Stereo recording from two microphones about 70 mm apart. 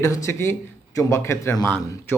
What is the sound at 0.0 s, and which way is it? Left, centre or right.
Speech, left.